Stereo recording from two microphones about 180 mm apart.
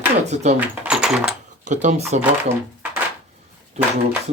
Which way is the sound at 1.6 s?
45° right (ahead or behind).